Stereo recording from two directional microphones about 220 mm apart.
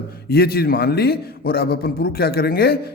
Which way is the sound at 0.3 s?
45° left (ahead or behind).